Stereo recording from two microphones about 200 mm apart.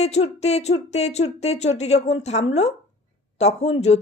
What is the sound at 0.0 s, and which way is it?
Speech, 30° left (ahead or behind).